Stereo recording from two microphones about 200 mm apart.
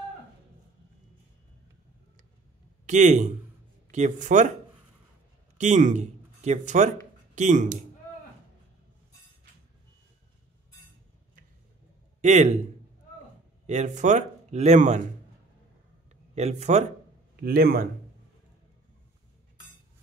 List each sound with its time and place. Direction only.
2.9 s speech: 35° right (ahead or behind)
5.6 s speech: 35° right (ahead or behind)
12.2 s a man's voice: 35° right (ahead or behind)
13.7 s speech: 35° right (ahead or behind)
16.1 s a sound: 35° right (ahead or behind)
17.4 s a man's voice: 50° right (ahead or behind)